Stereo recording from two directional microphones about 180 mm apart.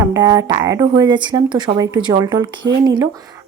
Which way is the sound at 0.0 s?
20° right (ahead or behind).